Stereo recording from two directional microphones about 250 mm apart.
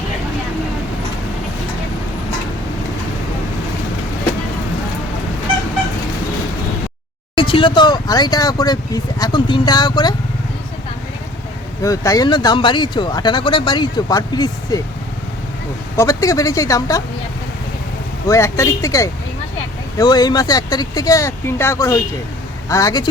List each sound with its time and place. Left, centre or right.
7.3 s speech: left
11.8 s speech: centre
16.0 s speech: centre
18.3 s speech: centre